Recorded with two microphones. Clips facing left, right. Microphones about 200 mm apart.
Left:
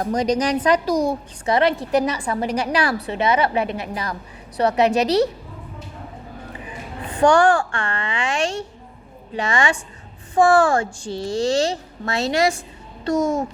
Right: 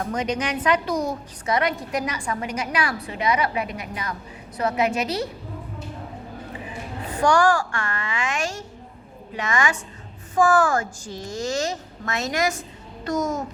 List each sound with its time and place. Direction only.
0.0 s a woman's voice: 35° left (ahead or behind)
7.2 s a woman's voice: 30° left (ahead or behind)